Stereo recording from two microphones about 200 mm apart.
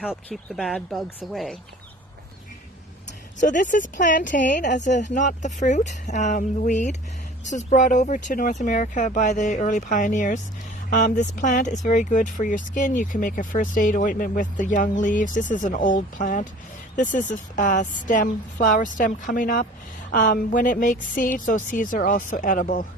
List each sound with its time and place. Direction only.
0.1 s speech: 5° left (ahead or behind)
3.4 s speech: 40° left (ahead or behind)
4.6 s a woman's voice: 60° left (ahead or behind)
4.9 s speech: 35° left (ahead or behind)